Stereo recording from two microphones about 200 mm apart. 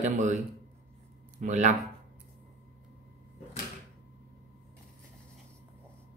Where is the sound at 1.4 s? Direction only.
35° right (ahead or behind).